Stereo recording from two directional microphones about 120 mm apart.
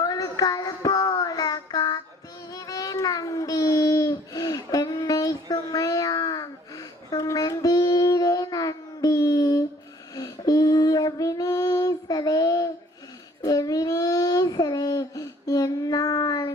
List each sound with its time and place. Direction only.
0.0 s music: 30° left (ahead or behind)
1.2 s child singing: 30° left (ahead or behind)
2.5 s a sound: 30° left (ahead or behind)
10.2 s female singing: 30° left (ahead or behind)
13.4 s child singing: 30° left (ahead or behind)